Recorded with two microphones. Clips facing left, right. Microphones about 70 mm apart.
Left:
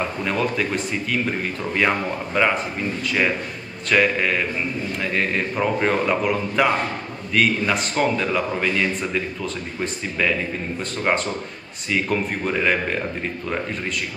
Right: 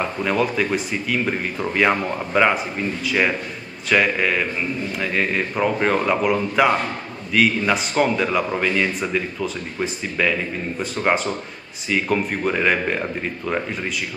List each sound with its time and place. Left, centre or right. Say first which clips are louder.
0.0 s a man's voice: right 2 dB; centre